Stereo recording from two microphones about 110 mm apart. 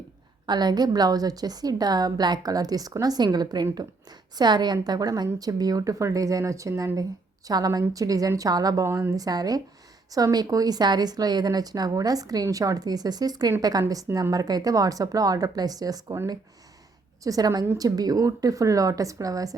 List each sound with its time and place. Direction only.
0.4 s speech: 40° right (ahead or behind)
17.2 s speech: 35° right (ahead or behind)